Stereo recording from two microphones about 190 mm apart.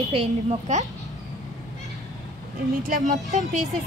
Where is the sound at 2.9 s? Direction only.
40° right (ahead or behind).